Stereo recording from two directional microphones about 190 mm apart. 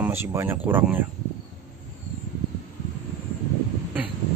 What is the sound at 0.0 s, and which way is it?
Speech, 10° right (ahead or behind).